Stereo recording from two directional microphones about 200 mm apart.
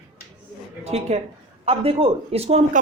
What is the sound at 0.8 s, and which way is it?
Speech, 30° right (ahead or behind).